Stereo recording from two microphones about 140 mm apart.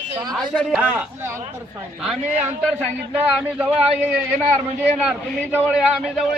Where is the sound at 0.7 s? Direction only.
15° right (ahead or behind).